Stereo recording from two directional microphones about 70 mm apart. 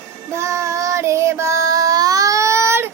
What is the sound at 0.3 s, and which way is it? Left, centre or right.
Child singing, right.